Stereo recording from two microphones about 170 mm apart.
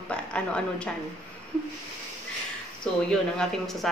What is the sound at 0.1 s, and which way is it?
Speech, 5° left (ahead or behind).